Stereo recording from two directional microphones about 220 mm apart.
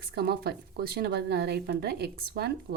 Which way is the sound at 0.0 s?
45° right (ahead or behind).